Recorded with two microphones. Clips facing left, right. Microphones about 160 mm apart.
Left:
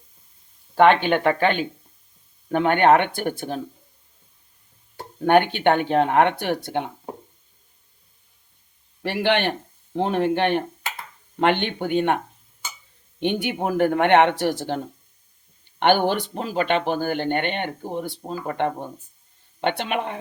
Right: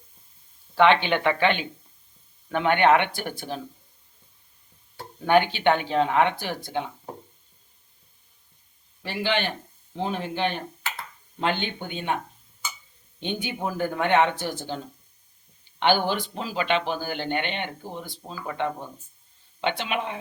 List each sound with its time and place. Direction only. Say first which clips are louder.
0.8 s speech: left 3 dB; 45° left (ahead or behind)
5.2 s speech: left 3 dB; 55° left (ahead or behind)
9.2 s speech: left 5 dB; 65° left (ahead or behind)
15.8 s speech: left 4 dB; 60° left (ahead or behind)